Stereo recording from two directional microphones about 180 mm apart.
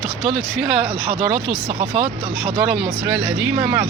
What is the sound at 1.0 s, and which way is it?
Speech, 30° right (ahead or behind).